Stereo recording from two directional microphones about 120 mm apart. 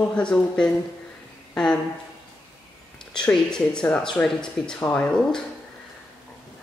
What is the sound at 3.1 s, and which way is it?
Speech, 5° left (ahead or behind).